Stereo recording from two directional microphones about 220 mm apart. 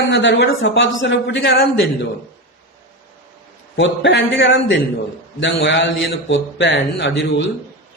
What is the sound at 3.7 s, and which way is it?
A man's voice, 55° left (ahead or behind).